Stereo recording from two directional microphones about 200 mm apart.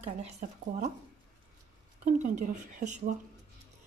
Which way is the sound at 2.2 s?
35° right (ahead or behind).